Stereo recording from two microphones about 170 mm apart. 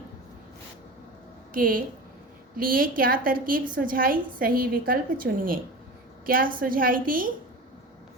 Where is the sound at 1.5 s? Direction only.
55° right (ahead or behind).